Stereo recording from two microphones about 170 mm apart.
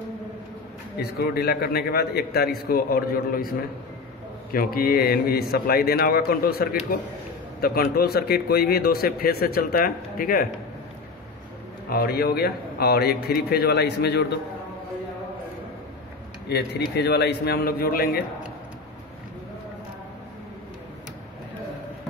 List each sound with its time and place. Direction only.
0.9 s speech: 65° left (ahead or behind)
11.9 s a man's voice: 65° left (ahead or behind)
16.4 s a man's voice: 75° left (ahead or behind)